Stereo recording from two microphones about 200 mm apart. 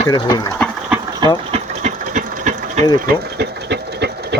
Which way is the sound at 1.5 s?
35° right (ahead or behind).